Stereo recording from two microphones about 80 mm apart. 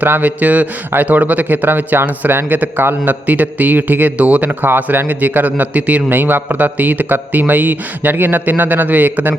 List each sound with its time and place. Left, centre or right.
0.0 s a man's voice: right